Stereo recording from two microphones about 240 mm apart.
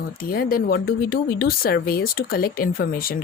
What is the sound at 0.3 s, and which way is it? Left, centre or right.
Speech, left.